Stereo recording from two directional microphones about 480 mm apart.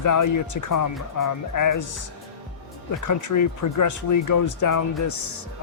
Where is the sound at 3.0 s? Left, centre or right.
Left.